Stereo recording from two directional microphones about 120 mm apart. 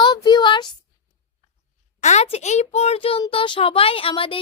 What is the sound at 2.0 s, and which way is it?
A child's voice, 75° left (ahead or behind).